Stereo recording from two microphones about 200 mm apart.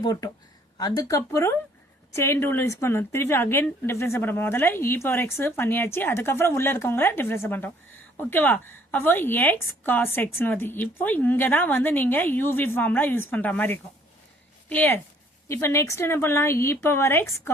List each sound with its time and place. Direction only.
0.0 s a woman's voice: 15° left (ahead or behind)